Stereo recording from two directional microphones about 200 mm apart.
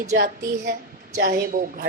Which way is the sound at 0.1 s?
45° right (ahead or behind).